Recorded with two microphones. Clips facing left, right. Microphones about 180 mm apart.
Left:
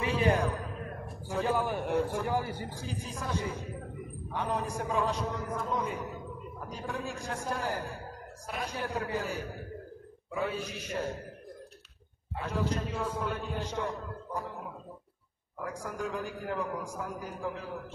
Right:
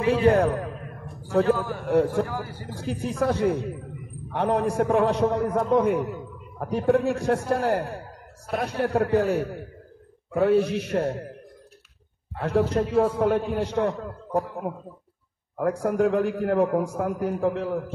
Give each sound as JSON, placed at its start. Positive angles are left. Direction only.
{"t": 0.1, "sound": "a man's voice", "side_deg": -65}
{"t": 1.5, "sound": "a man's voice", "side_deg": 20}
{"t": 1.9, "sound": "a man's voice", "side_deg": -65}
{"t": 2.2, "sound": "a man's voice", "side_deg": 20}
{"t": 2.7, "sound": "a man's voice", "side_deg": -65}
{"t": 12.4, "sound": "a man's voice", "side_deg": -65}
{"t": 15.8, "sound": "a man's voice", "side_deg": -65}